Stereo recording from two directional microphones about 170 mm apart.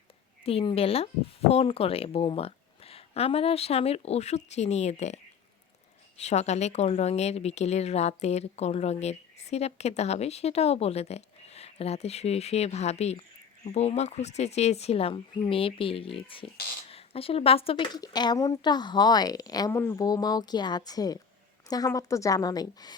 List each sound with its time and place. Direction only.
0.4 s a woman's voice: 35° left (ahead or behind)